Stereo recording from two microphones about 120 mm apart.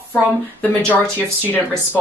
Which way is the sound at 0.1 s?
10° left (ahead or behind).